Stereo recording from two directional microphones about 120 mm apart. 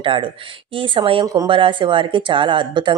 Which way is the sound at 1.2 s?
30° right (ahead or behind).